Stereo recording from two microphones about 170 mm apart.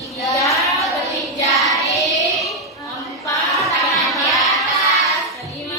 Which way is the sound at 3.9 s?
Centre (ahead or behind).